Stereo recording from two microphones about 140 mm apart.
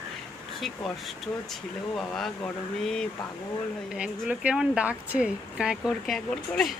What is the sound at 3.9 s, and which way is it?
Speech, 10° right (ahead or behind).